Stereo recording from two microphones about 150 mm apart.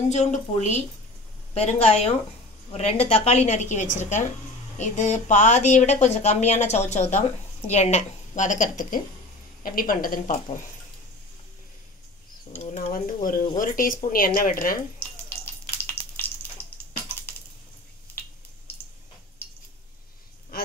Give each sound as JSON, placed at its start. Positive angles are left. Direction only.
{"t": 0.1, "sound": "speech", "side_deg": 50}
{"t": 9.6, "sound": "speech", "side_deg": 70}
{"t": 12.9, "sound": "speech", "side_deg": 70}
{"t": 15.4, "sound": "a sound", "side_deg": 15}